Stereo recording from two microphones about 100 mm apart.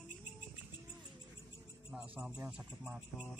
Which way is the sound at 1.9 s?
5° right (ahead or behind).